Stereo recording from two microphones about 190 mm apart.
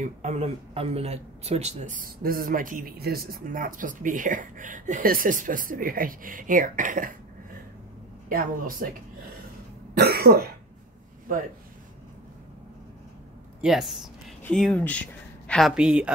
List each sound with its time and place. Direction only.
0.0 s speech: 40° right (ahead or behind)
8.3 s speech: 50° right (ahead or behind)
9.9 s cough: 55° right (ahead or behind)
13.6 s speech: centre (ahead or behind)
15.7 s a woman's voice: 5° right (ahead or behind)